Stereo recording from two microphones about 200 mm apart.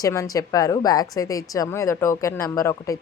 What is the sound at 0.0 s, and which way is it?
A woman's voice, 15° left (ahead or behind).